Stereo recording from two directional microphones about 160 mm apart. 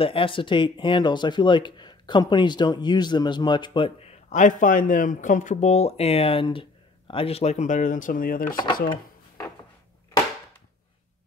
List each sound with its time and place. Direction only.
0.0 s speech: 35° left (ahead or behind); by 8.5 s 60° left (ahead or behind)